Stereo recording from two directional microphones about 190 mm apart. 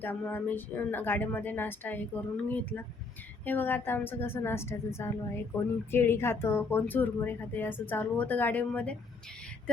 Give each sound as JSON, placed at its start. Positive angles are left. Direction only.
{"t": 0.0, "sound": "speech", "side_deg": 10}